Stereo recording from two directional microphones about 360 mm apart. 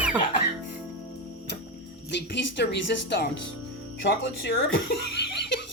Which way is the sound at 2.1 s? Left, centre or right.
Left.